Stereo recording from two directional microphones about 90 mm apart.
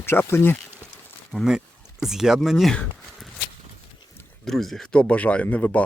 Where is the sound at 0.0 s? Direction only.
25° left (ahead or behind).